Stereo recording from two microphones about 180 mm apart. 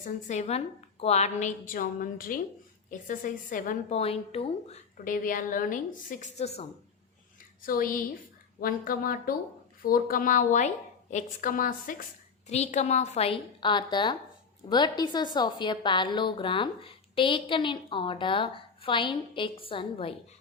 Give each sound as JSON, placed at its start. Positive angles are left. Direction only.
{"t": 0.0, "sound": "a woman's voice", "side_deg": 40}
{"t": 7.6, "sound": "a woman's voice", "side_deg": 50}
{"t": 12.5, "sound": "a woman's voice", "side_deg": 40}